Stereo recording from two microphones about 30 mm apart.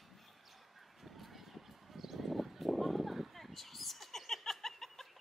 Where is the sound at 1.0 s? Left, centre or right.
Centre.